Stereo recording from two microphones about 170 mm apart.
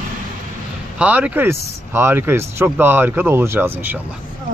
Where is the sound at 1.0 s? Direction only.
10° right (ahead or behind).